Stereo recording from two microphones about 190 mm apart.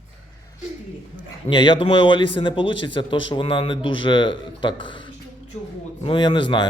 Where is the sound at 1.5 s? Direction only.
25° left (ahead or behind).